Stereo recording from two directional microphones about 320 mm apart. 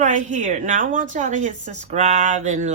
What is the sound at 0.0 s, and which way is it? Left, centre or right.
A woman's voice, right.